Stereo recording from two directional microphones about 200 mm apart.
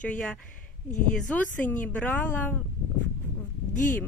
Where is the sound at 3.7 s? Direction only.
10° left (ahead or behind).